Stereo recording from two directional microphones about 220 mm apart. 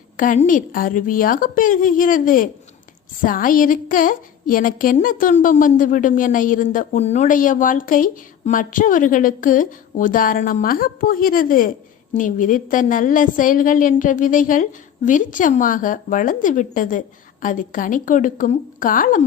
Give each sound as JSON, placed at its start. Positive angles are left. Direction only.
{"t": 0.2, "sound": "a woman's voice", "side_deg": 35}